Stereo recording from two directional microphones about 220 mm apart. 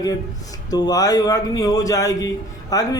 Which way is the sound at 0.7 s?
15° left (ahead or behind).